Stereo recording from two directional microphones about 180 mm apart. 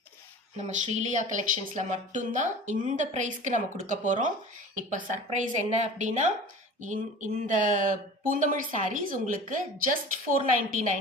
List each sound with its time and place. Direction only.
0.5 s speech: 40° right (ahead or behind)